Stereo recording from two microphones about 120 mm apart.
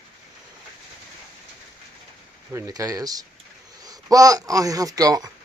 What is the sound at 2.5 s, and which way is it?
Speech, 30° right (ahead or behind).